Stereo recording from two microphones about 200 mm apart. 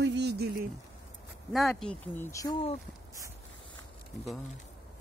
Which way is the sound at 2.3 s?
15° left (ahead or behind).